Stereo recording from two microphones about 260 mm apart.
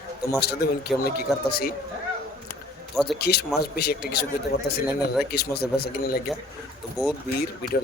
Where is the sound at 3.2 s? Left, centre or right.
Left.